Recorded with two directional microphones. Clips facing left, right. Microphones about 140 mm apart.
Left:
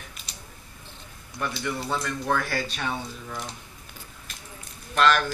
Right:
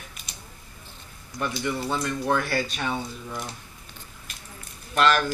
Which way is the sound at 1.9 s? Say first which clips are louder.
Right 1 dB; 15° right (ahead or behind).